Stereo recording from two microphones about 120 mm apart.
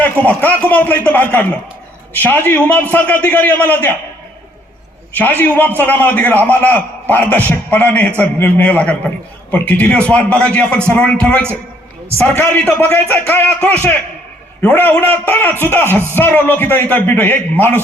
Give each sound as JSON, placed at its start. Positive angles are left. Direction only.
{"t": 0.0, "sound": "a man's voice", "side_deg": 15}
{"t": 5.1, "sound": "a man's voice", "side_deg": 15}